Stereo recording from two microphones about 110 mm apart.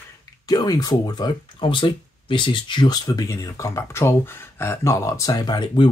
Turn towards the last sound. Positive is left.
turn(degrees=45)  # may be behind; listen again after turning